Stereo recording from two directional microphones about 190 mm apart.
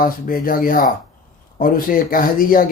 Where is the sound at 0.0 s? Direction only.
50° left (ahead or behind).